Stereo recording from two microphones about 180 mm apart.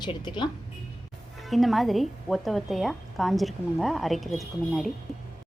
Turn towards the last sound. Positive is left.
turn(degrees=0)  # may be behind; listen again after turning